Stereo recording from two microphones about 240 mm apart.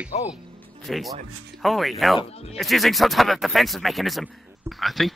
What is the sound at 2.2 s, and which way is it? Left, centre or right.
Speech, left.